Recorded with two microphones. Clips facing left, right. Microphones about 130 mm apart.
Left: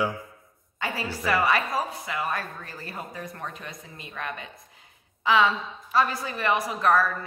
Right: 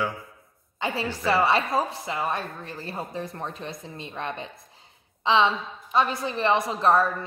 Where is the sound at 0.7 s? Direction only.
25° right (ahead or behind).